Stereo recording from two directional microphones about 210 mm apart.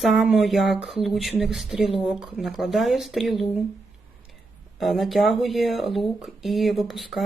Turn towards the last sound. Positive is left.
turn(degrees=0)  # may be behind; listen again after turning